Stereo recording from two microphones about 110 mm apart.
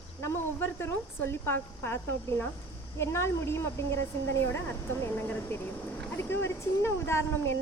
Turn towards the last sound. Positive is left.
turn(degrees=20)  # may be behind; listen again after turning